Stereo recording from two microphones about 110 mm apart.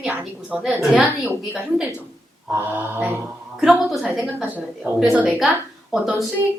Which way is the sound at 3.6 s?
Centre (ahead or behind).